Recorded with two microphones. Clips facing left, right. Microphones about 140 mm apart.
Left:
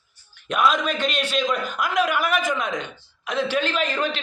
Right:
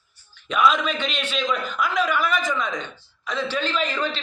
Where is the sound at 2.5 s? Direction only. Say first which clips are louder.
Left 1 dB; 55° left (ahead or behind).